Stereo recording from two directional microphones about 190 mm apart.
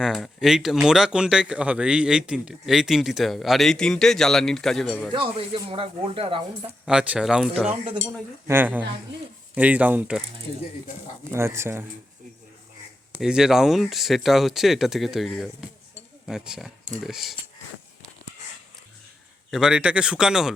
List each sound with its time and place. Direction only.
0.0 s speech: centre (ahead or behind)
5.1 s speech: 30° right (ahead or behind)
6.8 s speech: 5° right (ahead or behind)
11.3 s speech: 15° right (ahead or behind)
13.1 s speech: 5° right (ahead or behind)
19.5 s speech: 5° right (ahead or behind)